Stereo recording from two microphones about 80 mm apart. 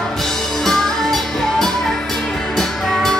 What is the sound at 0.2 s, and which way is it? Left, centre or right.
Music, centre.